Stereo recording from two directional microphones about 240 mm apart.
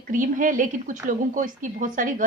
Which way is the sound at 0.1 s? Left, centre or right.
Right.